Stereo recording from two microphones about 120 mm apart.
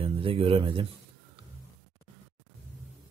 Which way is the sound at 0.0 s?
50° right (ahead or behind).